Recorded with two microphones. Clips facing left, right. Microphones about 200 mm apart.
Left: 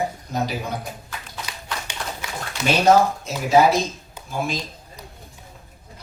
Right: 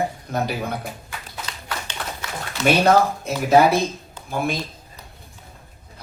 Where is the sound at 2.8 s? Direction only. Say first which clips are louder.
Left 1 dB; 60° right (ahead or behind).